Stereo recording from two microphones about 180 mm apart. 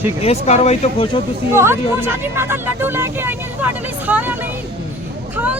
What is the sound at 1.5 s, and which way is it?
Speech, 15° right (ahead or behind).